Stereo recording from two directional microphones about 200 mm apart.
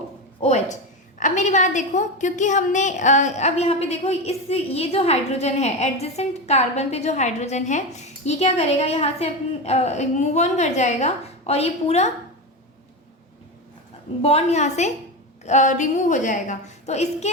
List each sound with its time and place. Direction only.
0.4 s a woman's voice: 35° left (ahead or behind)
14.2 s a woman's voice: 30° left (ahead or behind)